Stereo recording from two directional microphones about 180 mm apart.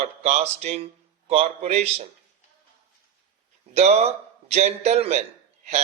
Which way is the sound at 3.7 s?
35° right (ahead or behind).